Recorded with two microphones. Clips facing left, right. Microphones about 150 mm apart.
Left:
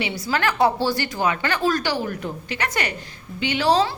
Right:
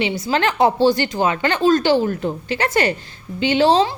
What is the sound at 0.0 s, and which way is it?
A woman's voice, 25° right (ahead or behind).